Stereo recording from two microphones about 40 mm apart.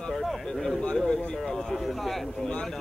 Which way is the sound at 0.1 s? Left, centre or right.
Centre.